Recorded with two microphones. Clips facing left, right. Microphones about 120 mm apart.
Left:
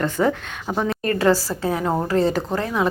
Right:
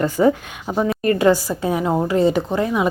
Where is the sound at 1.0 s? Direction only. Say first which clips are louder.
Right 3 dB; 15° right (ahead or behind).